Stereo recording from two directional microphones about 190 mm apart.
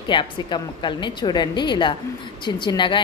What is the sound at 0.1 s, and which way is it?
A woman's voice, 25° left (ahead or behind).